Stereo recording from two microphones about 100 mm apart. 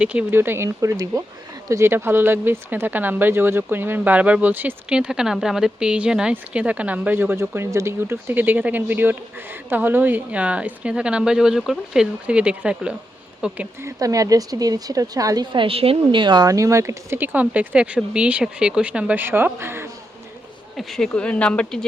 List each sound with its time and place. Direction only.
0.0 s speech: 15° right (ahead or behind)
13.8 s a woman's voice: 35° right (ahead or behind)
15.5 s speech: 70° right (ahead or behind)
16.2 s speech: 50° right (ahead or behind)
16.5 s a woman's voice: 35° right (ahead or behind)
17.2 s speech: 15° right (ahead or behind)
20.7 s speech: 5° left (ahead or behind)